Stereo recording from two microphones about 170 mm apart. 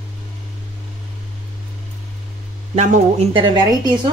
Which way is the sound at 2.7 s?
45° right (ahead or behind).